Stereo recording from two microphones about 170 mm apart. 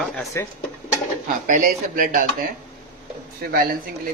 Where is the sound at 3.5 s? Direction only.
60° right (ahead or behind).